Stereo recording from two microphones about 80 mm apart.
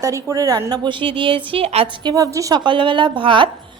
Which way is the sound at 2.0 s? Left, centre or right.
Right.